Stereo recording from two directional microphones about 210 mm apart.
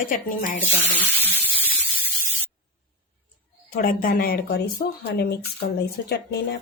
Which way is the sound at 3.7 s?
40° left (ahead or behind).